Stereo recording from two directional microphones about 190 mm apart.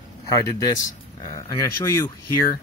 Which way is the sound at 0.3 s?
20° left (ahead or behind).